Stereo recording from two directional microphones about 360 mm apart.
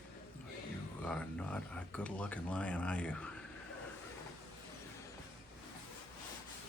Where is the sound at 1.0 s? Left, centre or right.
Centre.